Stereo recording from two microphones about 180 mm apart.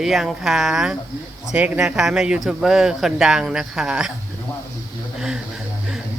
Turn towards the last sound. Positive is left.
turn(degrees=-5)  # may be behind; listen again after turning